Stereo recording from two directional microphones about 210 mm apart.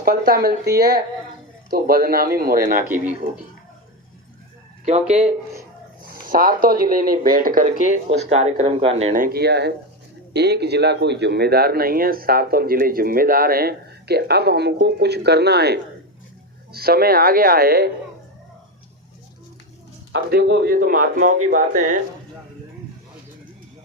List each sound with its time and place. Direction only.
0.0 s speech: 45° right (ahead or behind)
0.8 s speech: 20° right (ahead or behind)
1.7 s speech: 45° right (ahead or behind)
5.0 s speech: 5° right (ahead or behind)
6.1 s speech: 45° right (ahead or behind)
20.1 s speech: 50° right (ahead or behind)